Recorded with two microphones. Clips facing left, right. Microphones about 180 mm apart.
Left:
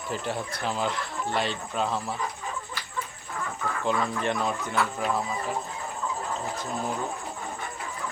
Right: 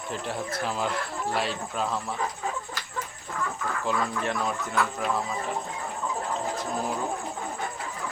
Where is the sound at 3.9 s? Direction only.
Centre (ahead or behind).